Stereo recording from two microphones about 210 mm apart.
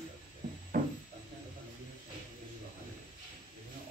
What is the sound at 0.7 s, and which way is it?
Music, 40° right (ahead or behind).